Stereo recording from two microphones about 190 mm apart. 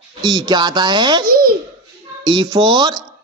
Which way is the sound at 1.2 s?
50° right (ahead or behind).